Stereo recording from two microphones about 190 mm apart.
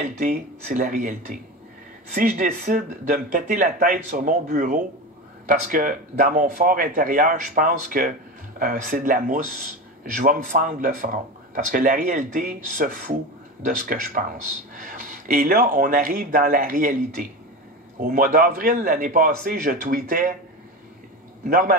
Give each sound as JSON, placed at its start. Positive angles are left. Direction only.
{"t": 0.2, "sound": "speech", "side_deg": -45}
{"t": 21.5, "sound": "speech", "side_deg": -45}